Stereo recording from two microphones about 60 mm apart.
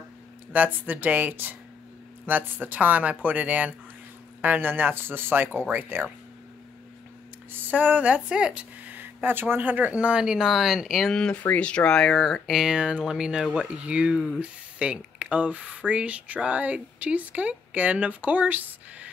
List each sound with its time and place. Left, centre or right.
0.5 s speech: right
7.7 s speech: right
8.9 s speech: right
9.8 s speech: centre
11.1 s speech: centre
12.7 s speech: centre